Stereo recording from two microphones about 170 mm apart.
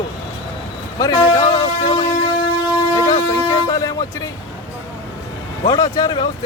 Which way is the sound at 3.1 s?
25° left (ahead or behind).